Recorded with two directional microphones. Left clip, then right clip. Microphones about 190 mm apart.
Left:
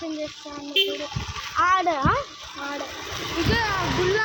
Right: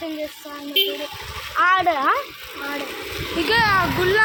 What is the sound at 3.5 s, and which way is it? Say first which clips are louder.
Speech: right 8 dB; 35° right (ahead or behind).